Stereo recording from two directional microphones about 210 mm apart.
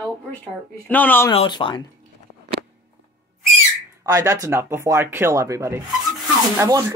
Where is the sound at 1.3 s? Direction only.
25° left (ahead or behind).